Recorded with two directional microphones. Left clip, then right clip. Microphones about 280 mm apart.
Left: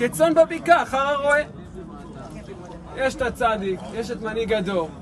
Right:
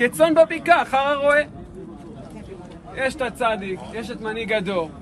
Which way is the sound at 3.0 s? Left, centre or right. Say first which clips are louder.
Left 1 dB; centre.